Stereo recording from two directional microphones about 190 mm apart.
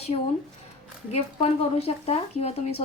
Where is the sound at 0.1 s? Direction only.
30° left (ahead or behind).